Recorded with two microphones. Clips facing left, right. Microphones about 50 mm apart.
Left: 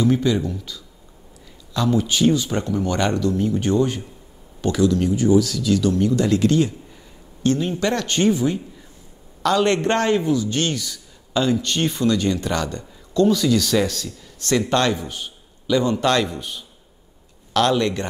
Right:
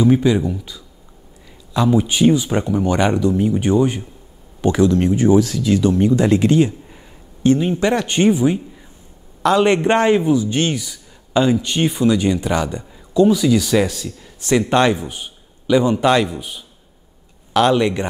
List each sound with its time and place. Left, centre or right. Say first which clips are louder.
0.0 s a man's voice: right 4 dB; centre